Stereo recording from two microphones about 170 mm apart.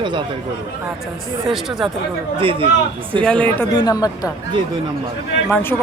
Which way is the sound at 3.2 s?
5° left (ahead or behind).